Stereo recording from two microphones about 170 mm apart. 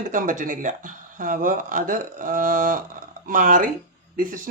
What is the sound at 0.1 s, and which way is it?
Speech, 50° right (ahead or behind).